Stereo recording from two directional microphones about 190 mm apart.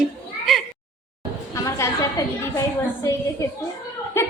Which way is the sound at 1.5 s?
15° left (ahead or behind).